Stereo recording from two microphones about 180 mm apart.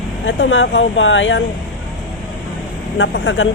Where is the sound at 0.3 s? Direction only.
90° left.